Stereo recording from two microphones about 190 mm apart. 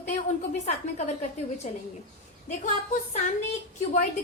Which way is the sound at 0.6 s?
35° left (ahead or behind).